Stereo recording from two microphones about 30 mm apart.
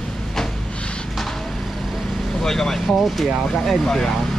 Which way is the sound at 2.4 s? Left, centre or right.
Centre.